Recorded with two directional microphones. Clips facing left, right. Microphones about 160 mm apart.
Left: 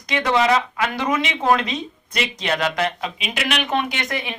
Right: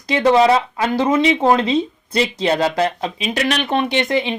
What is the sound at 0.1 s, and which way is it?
Speech, 30° right (ahead or behind).